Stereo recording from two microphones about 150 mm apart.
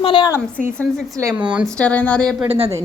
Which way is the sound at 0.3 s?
15° left (ahead or behind).